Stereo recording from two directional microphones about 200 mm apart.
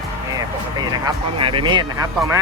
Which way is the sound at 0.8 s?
25° right (ahead or behind).